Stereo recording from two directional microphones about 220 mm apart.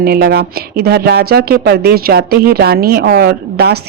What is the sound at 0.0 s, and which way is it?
Speech, 45° right (ahead or behind).